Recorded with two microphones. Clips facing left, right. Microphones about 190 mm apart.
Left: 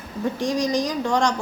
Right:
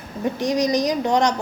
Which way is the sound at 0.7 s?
20° right (ahead or behind).